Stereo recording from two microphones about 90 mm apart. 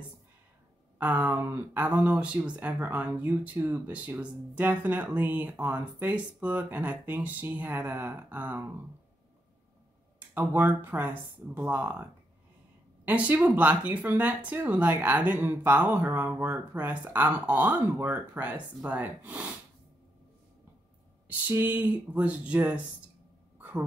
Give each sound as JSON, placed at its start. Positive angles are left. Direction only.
{"t": 0.9, "sound": "speech", "side_deg": -20}
{"t": 10.1, "sound": "speech", "side_deg": -20}
{"t": 21.3, "sound": "speech", "side_deg": -20}
{"t": 23.6, "sound": "a sound", "side_deg": -20}